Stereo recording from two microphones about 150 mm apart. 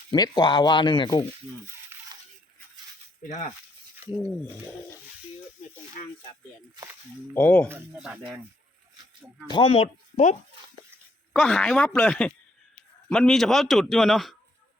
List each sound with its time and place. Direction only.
0.1 s speech: 30° left (ahead or behind)
1.9 s a sound: 15° right (ahead or behind)
4.2 s speech: 10° left (ahead or behind)
7.3 s speech: 10° left (ahead or behind)
7.9 s a man's voice: 5° right (ahead or behind)
9.5 s speech: 35° left (ahead or behind)
11.3 s a man's voice: 5° left (ahead or behind)